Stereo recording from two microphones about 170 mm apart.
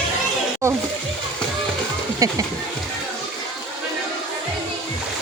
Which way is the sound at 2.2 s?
20° right (ahead or behind).